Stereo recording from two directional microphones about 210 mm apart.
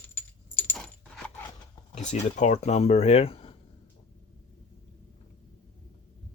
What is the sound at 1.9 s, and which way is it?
Speech, 35° left (ahead or behind).